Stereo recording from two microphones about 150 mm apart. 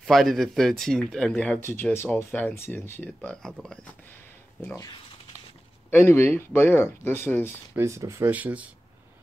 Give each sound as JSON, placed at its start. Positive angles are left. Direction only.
{"t": 0.0, "sound": "speech", "side_deg": 0}
{"t": 3.2, "sound": "speech", "side_deg": 5}
{"t": 5.9, "sound": "speech", "side_deg": 15}
{"t": 7.7, "sound": "speech", "side_deg": -20}